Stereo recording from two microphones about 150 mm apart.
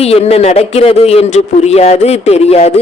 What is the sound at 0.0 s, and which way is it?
A woman's voice, 45° left (ahead or behind).